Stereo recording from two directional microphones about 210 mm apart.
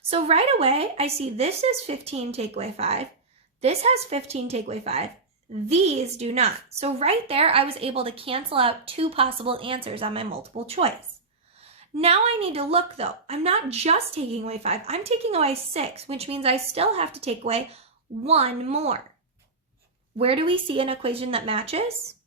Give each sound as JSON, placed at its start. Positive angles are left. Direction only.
{"t": 0.1, "sound": "a woman's voice", "side_deg": -30}
{"t": 20.1, "sound": "a woman's voice", "side_deg": -25}